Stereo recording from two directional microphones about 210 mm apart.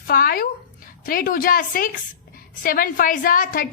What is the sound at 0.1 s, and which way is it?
A woman's voice, 45° left (ahead or behind).